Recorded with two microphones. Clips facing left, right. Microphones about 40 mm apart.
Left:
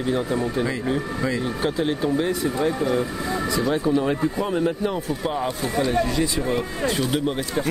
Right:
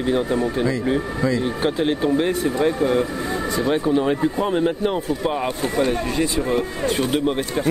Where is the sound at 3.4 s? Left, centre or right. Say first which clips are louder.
Right 2 dB; right.